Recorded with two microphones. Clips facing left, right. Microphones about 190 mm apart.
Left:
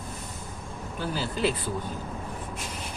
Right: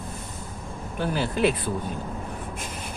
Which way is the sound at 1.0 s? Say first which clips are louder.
Right 5 dB; 60° right (ahead or behind).